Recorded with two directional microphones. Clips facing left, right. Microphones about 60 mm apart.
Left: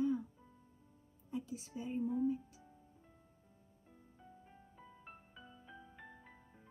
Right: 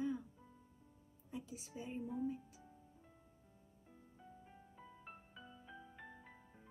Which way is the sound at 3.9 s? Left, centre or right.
Centre.